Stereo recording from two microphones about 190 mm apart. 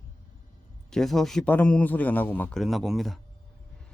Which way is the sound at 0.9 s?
Centre (ahead or behind).